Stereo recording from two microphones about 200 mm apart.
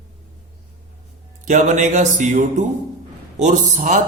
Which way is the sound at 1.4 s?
40° right (ahead or behind).